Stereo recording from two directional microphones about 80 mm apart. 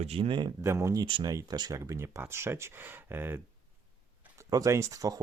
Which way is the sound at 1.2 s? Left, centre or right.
Right.